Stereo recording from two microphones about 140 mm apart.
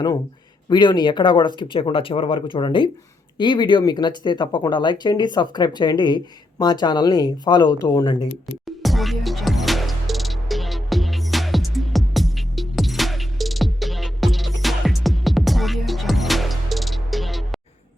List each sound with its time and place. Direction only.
0.7 s speech: 30° left (ahead or behind)
8.6 s music: centre (ahead or behind)